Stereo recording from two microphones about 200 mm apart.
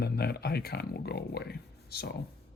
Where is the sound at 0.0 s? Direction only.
50° left (ahead or behind).